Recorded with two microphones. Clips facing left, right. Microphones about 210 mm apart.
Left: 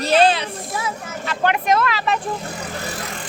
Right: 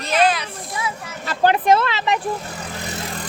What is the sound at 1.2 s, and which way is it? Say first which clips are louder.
Speech: right 3 dB; 35° right (ahead or behind).